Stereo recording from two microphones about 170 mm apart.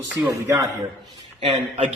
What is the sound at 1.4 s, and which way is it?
Speech, 30° right (ahead or behind).